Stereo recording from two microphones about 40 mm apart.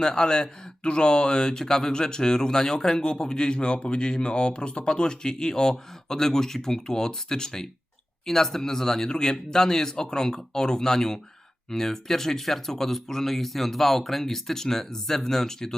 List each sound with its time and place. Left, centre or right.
0.0 s speech: centre